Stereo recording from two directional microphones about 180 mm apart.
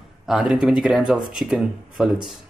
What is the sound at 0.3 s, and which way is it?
Speech, 5° right (ahead or behind).